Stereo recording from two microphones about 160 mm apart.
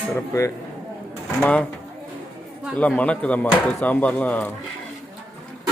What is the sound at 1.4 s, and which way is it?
Speech, 10° left (ahead or behind).